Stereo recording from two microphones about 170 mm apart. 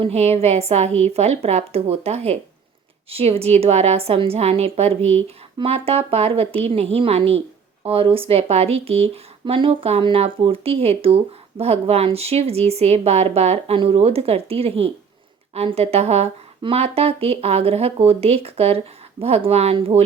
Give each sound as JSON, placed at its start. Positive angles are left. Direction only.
{"t": 0.0, "sound": "speech", "side_deg": -40}